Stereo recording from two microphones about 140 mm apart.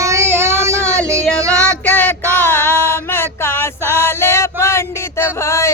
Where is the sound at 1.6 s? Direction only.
10° left (ahead or behind).